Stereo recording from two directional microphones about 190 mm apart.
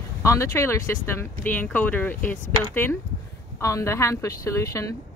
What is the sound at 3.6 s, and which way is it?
Speech, 15° left (ahead or behind).